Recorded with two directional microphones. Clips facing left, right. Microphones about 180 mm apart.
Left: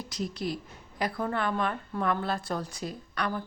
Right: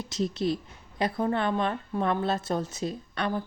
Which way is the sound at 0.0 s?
25° right (ahead or behind).